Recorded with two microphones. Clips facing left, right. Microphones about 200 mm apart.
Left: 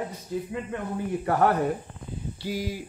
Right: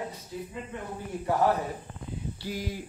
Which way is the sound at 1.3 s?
65° left (ahead or behind).